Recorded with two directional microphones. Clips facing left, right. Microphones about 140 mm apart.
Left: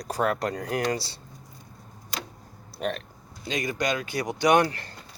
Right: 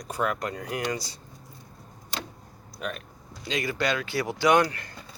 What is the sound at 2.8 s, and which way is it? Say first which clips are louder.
Speech: left 5 dB; 30° left (ahead or behind).